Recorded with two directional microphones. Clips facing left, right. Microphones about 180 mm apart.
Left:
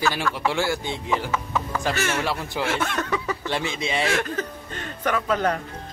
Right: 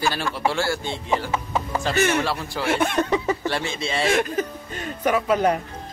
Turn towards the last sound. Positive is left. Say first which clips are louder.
# right 3 dB
turn(degrees=-10)  # may be behind; listen again after turning